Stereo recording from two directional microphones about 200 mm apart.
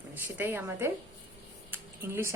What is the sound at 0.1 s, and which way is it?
A woman's voice, 10° right (ahead or behind).